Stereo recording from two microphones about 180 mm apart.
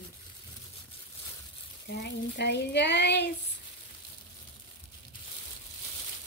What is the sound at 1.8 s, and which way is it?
Speech, 70° left (ahead or behind).